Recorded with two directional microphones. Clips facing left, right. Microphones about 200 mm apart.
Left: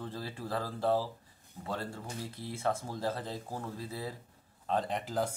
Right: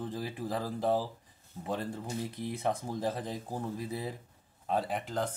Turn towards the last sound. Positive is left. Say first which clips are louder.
# even
turn(degrees=5)  # may be behind; listen again after turning